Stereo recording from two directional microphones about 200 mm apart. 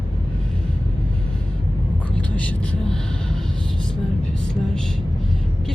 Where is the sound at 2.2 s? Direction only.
5° left (ahead or behind).